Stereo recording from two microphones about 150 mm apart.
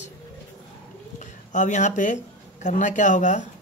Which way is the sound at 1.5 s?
55° left (ahead or behind).